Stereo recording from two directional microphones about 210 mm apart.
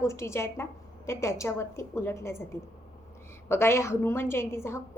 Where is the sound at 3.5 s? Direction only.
10° left (ahead or behind).